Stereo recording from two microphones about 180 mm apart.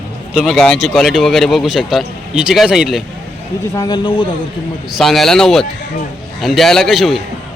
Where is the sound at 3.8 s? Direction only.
25° left (ahead or behind).